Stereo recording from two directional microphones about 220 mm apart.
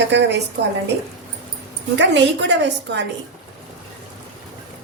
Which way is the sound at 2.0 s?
55° right (ahead or behind).